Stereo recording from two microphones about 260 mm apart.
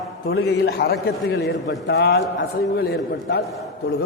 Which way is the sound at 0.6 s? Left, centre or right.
Left.